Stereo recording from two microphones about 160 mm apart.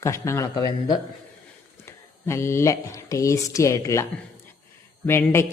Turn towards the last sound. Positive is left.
turn(degrees=15)  # may be behind; listen again after turning